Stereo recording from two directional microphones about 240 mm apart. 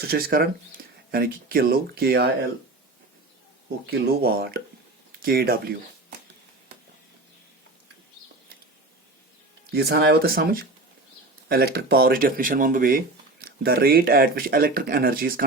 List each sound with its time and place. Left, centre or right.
0.0 s speech: right
3.8 s speech: right
9.7 s speech: right